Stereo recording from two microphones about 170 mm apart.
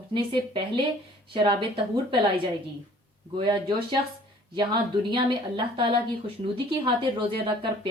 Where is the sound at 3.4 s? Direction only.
25° right (ahead or behind).